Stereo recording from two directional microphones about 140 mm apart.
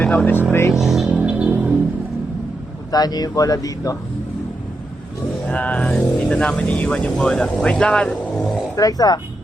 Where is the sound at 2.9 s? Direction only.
30° left (ahead or behind).